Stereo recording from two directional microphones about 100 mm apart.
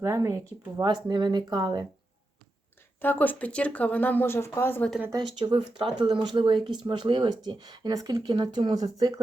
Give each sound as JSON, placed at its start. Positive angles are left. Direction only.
{"t": 0.0, "sound": "speech", "side_deg": -30}
{"t": 0.8, "sound": "speech", "side_deg": -45}
{"t": 3.0, "sound": "speech", "side_deg": 20}
{"t": 5.1, "sound": "speech", "side_deg": -45}
{"t": 6.7, "sound": "speech", "side_deg": -50}